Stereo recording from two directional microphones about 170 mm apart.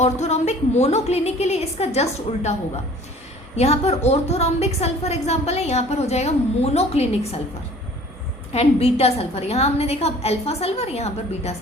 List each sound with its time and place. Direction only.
0.0 s a woman's voice: 40° left (ahead or behind)
8.5 s a woman's voice: 35° left (ahead or behind)